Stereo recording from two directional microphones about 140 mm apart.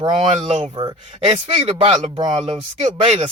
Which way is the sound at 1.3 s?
45° right (ahead or behind).